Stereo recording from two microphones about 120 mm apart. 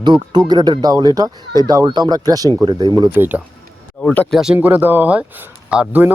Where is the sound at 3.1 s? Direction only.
15° right (ahead or behind).